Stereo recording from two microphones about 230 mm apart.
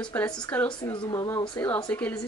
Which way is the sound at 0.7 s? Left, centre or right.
Centre.